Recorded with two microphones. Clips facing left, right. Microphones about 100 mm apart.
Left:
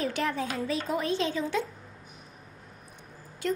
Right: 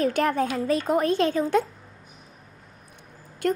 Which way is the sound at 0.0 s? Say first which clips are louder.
Right 7 dB; 50° right (ahead or behind).